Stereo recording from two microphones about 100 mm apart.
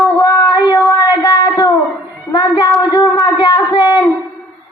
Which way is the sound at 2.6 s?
45° left (ahead or behind).